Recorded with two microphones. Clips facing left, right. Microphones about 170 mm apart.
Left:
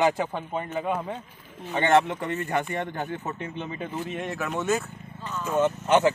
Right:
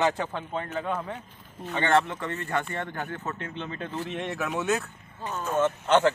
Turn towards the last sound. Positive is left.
turn(degrees=10)  # may be behind; listen again after turning